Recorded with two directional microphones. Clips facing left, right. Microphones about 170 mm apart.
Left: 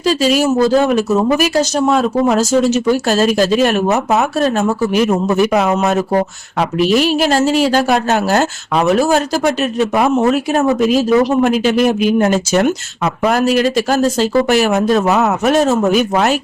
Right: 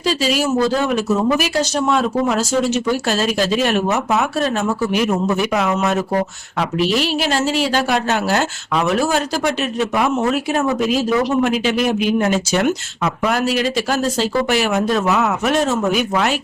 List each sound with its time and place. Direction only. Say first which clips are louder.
0.0 s speech: left 5 dB; 45° left (ahead or behind)